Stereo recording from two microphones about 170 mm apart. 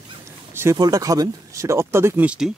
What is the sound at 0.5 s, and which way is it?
Speech, 15° right (ahead or behind).